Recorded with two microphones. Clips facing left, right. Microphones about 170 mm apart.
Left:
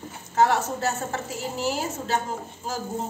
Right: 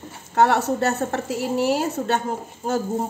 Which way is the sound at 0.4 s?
65° right (ahead or behind).